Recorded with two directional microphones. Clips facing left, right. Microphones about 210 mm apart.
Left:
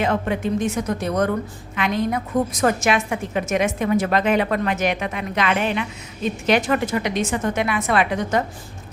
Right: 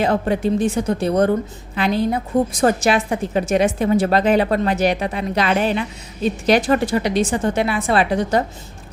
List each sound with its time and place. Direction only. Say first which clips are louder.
0.0 s a woman's voice: right 3 dB; 35° right (ahead or behind)